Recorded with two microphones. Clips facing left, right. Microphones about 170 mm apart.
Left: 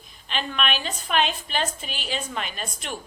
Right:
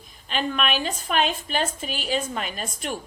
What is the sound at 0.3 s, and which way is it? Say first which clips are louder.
A woman's voice: right 2 dB; 40° right (ahead or behind).